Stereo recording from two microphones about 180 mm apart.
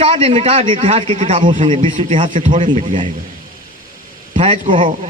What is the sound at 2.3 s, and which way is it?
Speech, 45° right (ahead or behind).